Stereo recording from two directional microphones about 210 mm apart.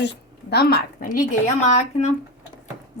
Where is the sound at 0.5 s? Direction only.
45° left (ahead or behind).